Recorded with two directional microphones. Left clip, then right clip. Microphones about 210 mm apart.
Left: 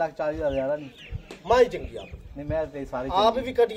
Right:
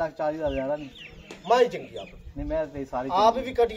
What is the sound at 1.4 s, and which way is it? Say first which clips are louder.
Speech: left 1 dB; 20° left (ahead or behind).